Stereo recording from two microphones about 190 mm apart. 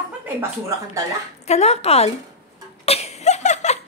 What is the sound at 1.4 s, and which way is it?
Speech, 35° left (ahead or behind).